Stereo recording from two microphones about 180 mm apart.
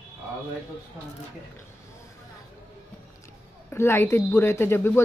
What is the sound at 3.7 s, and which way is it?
A woman's voice, 15° left (ahead or behind).